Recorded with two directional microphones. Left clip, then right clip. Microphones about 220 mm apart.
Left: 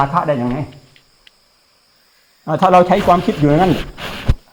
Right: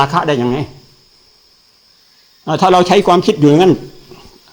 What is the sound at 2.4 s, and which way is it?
Speech, 10° right (ahead or behind).